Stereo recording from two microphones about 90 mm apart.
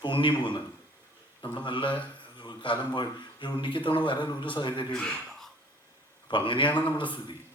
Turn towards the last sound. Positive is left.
turn(degrees=65)  # may be behind; listen again after turning